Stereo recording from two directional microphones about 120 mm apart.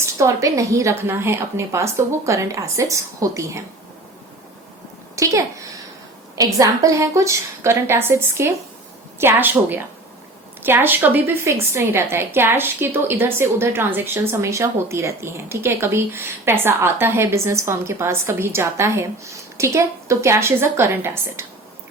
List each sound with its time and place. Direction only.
0.0 s a woman's voice: 25° right (ahead or behind)
5.1 s a woman's voice: 25° right (ahead or behind)